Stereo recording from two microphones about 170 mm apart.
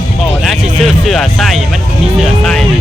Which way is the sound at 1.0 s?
Centre (ahead or behind).